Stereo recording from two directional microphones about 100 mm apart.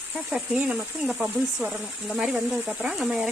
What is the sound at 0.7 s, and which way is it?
Speech, 15° right (ahead or behind).